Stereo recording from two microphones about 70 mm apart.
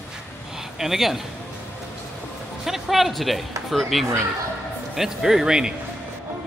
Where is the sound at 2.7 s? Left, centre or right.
Centre.